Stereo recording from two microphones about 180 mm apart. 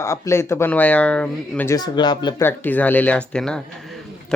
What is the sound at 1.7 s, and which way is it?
Speech, 25° left (ahead or behind).